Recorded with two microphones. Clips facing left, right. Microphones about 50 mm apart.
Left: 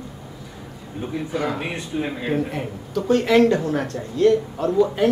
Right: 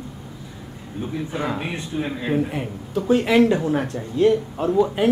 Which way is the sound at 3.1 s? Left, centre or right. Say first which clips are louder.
Left 1 dB; centre.